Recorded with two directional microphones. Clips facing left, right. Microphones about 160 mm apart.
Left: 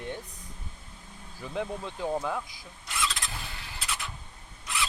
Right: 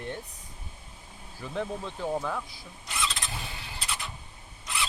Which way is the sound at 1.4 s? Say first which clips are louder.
Even; 15° left (ahead or behind).